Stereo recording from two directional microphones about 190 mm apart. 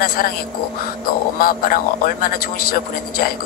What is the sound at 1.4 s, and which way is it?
Speech, 50° left (ahead or behind).